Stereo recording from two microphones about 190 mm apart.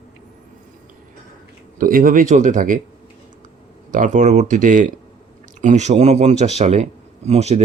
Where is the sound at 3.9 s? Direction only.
40° right (ahead or behind).